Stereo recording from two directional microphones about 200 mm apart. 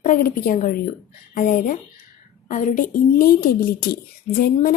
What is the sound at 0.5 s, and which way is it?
A woman's voice, 45° left (ahead or behind).